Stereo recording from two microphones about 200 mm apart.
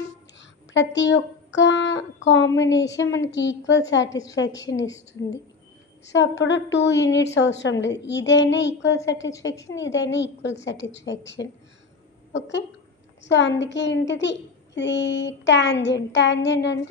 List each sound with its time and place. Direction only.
0.4 s a woman's voice: 65° left (ahead or behind)
4.1 s a woman's voice: 15° left (ahead or behind)
5.2 s a woman's voice: 80° left
6.1 s a child's voice: 65° left (ahead or behind)